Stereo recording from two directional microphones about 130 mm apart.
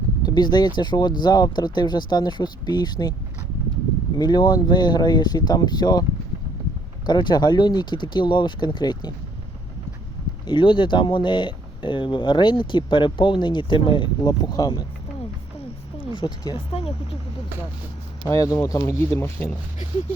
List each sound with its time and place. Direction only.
0.2 s speech: 30° left (ahead or behind)
4.2 s speech: 35° left (ahead or behind)
10.4 s speech: 40° left (ahead or behind)
16.0 s speech: 35° left (ahead or behind)
18.3 s speech: 25° left (ahead or behind)